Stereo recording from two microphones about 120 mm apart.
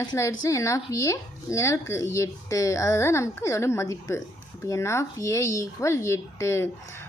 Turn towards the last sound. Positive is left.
turn(degrees=20)  # may be behind; listen again after turning